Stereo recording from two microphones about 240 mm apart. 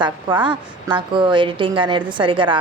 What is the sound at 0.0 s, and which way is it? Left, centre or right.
A woman's voice, centre.